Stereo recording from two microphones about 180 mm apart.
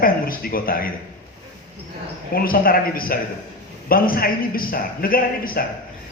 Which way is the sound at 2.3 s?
55° left (ahead or behind).